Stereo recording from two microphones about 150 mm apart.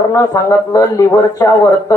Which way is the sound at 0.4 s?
20° left (ahead or behind).